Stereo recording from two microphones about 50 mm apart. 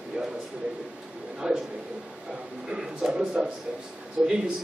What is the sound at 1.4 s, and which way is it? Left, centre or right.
Speech, centre.